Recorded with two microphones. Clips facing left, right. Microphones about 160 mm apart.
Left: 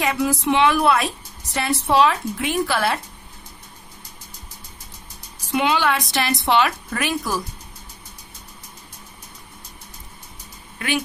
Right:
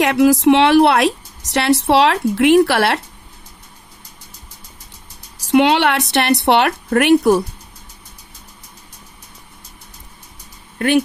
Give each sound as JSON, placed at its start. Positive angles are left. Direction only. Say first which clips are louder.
{"t": 0.0, "sound": "a woman's voice", "louder": "right 9 dB", "side_deg": -75}
{"t": 5.5, "sound": "a woman's voice", "louder": "right 7 dB", "side_deg": -75}